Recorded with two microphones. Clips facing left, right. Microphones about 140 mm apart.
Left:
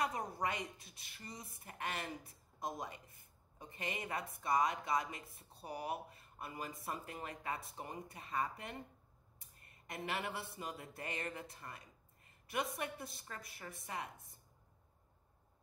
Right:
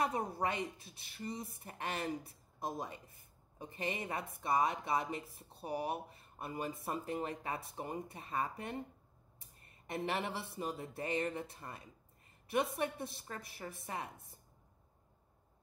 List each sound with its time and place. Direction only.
0.0 s speech: 30° right (ahead or behind)
9.8 s speech: 30° right (ahead or behind)